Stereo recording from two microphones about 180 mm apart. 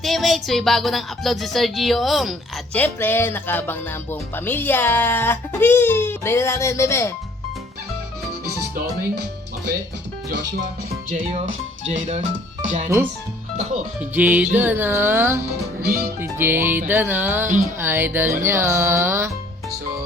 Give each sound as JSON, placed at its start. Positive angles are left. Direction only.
{"t": 0.0, "sound": "speech", "side_deg": 0}
{"t": 2.7, "sound": "music", "side_deg": 10}
{"t": 8.7, "sound": "speech", "side_deg": -55}
{"t": 11.9, "sound": "speech", "side_deg": -40}
{"t": 14.0, "sound": "music", "side_deg": -10}
{"t": 15.8, "sound": "music", "side_deg": -60}
{"t": 16.2, "sound": "music", "side_deg": -10}